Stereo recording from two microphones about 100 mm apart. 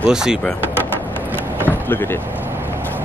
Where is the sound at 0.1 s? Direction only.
5° right (ahead or behind).